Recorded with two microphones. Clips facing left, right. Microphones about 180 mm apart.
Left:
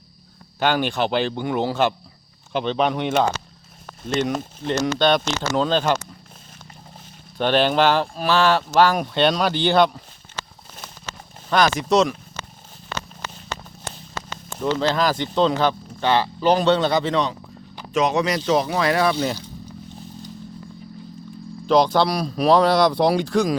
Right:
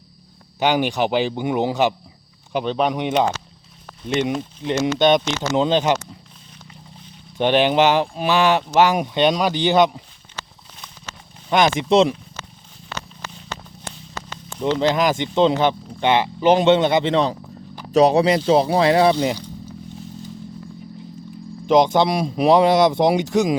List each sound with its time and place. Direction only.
0.6 s speech: 15° right (ahead or behind)
4.3 s speech: 45° left (ahead or behind)
4.7 s a man's voice: 15° right (ahead or behind)
7.3 s speech: 15° right (ahead or behind)
11.4 s a man's voice: 20° right (ahead or behind)
14.6 s a man's voice: 20° right (ahead or behind)
21.7 s a man's voice: 20° right (ahead or behind)